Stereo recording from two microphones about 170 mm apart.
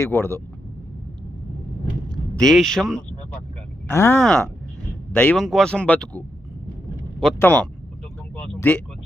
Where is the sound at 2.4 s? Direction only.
5° left (ahead or behind).